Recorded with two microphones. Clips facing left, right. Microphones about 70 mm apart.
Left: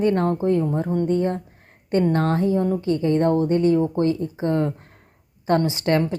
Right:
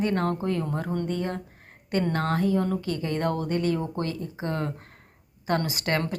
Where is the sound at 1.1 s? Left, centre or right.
Left.